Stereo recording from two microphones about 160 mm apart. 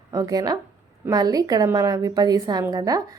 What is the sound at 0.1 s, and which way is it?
A woman's voice, 20° right (ahead or behind).